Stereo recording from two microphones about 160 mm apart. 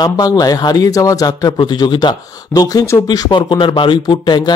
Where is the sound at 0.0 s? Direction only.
25° left (ahead or behind).